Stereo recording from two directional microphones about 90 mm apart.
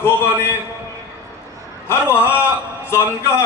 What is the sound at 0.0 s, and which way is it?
Speech, 30° left (ahead or behind).